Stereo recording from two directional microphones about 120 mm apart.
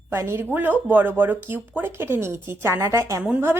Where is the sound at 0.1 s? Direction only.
20° right (ahead or behind).